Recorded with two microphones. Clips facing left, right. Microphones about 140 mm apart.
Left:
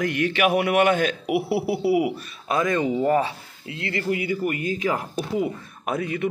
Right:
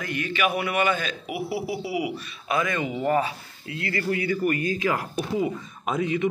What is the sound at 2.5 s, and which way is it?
A man's voice, 35° left (ahead or behind).